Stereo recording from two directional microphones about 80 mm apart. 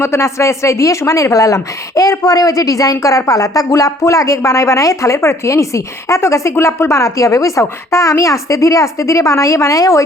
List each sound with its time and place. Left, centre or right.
0.0 s a woman's voice: left